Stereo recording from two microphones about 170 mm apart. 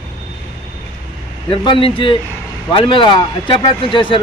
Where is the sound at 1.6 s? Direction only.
30° left (ahead or behind).